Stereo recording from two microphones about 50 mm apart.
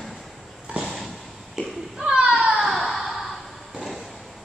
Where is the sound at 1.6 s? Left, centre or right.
Centre.